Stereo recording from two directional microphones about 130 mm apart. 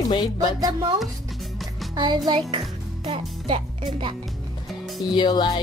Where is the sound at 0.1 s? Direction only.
35° left (ahead or behind).